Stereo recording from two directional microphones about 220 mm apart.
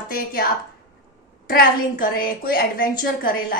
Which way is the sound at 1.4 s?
40° left (ahead or behind).